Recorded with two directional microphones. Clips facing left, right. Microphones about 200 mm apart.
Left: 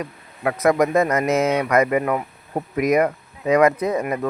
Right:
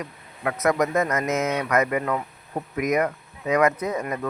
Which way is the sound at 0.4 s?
30° left (ahead or behind).